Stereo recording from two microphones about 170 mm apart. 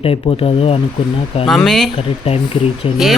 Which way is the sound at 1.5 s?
Centre (ahead or behind).